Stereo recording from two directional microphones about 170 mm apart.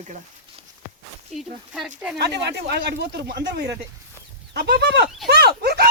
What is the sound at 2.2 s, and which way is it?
Speech, 80° right.